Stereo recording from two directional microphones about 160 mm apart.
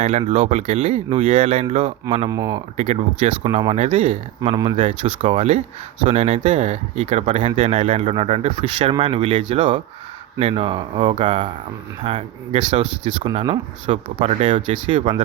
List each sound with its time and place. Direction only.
0.0 s speech: 45° right (ahead or behind)
2.3 s speech: 20° right (ahead or behind)
2.7 s speech: 40° right (ahead or behind)
3.4 s speech: 30° right (ahead or behind); by 15.1 s 45° right (ahead or behind)